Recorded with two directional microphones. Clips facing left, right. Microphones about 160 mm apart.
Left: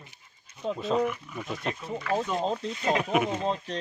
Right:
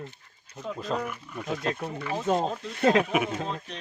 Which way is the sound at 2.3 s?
75° right (ahead or behind).